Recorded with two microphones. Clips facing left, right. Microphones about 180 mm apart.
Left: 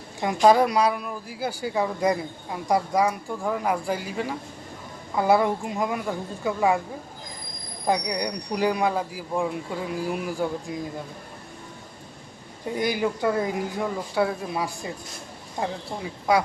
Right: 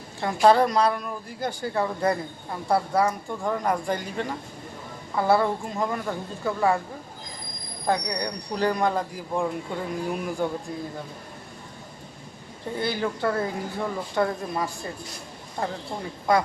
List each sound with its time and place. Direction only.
0.4 s speech: 10° left (ahead or behind)
7.9 s speech: 15° left (ahead or behind)
12.7 s speech: 15° left (ahead or behind)
16.3 s speech: 10° left (ahead or behind)